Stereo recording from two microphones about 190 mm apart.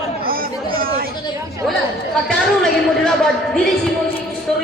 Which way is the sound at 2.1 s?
5° left (ahead or behind).